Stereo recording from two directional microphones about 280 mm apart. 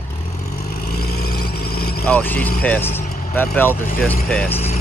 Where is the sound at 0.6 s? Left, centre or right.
Left.